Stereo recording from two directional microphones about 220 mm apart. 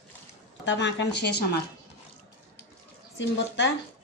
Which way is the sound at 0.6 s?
55° left (ahead or behind).